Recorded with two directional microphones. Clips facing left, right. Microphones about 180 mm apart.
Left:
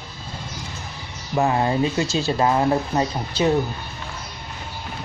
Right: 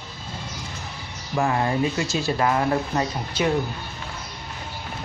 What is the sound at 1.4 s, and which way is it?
Speech, 25° left (ahead or behind).